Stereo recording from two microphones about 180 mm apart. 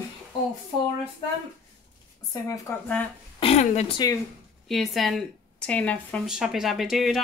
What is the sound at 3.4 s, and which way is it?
Speech, 40° left (ahead or behind).